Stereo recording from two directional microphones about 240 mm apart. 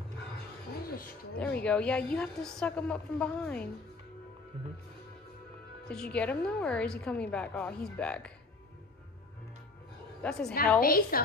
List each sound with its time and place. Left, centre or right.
0.8 s a sound: left
1.4 s a woman's voice: centre
5.9 s a woman's voice: centre
10.2 s a woman's voice: centre
10.8 s a woman's voice: left